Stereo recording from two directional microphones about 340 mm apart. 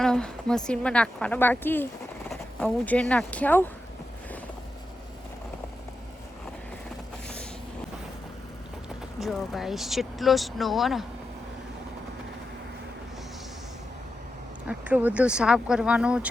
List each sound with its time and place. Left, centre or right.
0.0 s a woman's voice: centre
9.1 s a woman's voice: centre
14.7 s a woman's voice: centre